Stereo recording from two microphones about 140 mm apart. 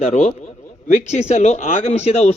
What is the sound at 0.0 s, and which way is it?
A man's voice, 55° left (ahead or behind).